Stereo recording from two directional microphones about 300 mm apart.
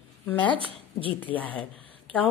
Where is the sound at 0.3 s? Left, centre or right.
Centre.